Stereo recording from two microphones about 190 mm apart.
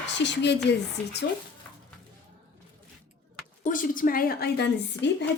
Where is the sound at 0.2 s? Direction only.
65° left (ahead or behind).